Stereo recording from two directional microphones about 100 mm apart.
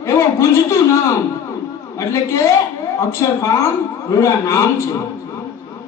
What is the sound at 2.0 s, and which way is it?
A man's voice, 30° left (ahead or behind).